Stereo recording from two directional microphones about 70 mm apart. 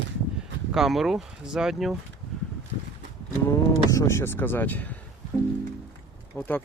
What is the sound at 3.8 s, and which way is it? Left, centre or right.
Speech, left.